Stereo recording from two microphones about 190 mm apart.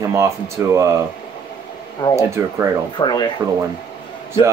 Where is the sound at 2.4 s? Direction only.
10° right (ahead or behind).